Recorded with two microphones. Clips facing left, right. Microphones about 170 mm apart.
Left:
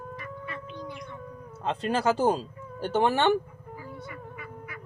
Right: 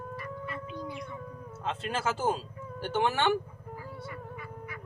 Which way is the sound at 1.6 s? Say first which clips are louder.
Left 6 dB; 35° left (ahead or behind).